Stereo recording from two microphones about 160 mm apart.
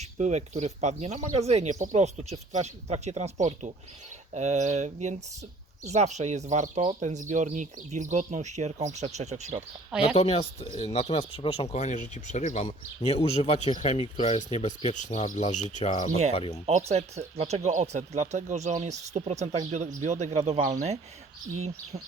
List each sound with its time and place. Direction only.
0.0 s speech: 45° right (ahead or behind)
10.2 s speech: 40° left (ahead or behind)
16.6 s speech: 45° right (ahead or behind)